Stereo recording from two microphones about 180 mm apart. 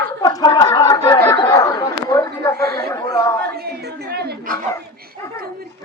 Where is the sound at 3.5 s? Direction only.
60° right (ahead or behind).